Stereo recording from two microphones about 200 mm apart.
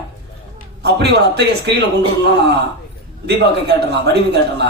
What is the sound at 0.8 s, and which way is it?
Speech, 55° right (ahead or behind).